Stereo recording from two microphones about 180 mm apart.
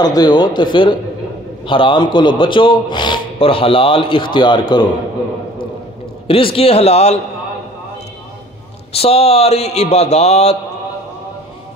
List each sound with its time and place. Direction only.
0.0 s speech: 20° left (ahead or behind)
6.2 s a man's voice: 30° left (ahead or behind)
8.9 s a man's voice: 35° left (ahead or behind)